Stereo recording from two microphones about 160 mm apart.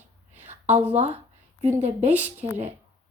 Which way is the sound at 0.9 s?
45° right (ahead or behind).